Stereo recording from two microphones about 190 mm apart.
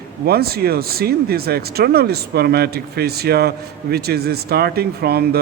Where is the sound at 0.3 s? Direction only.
55° right (ahead or behind).